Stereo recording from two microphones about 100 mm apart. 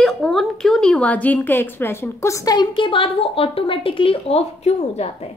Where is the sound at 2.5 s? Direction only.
55° left (ahead or behind).